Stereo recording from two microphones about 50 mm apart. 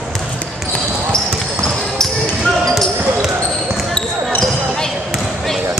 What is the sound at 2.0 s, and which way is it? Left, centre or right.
Basketball bounce, centre.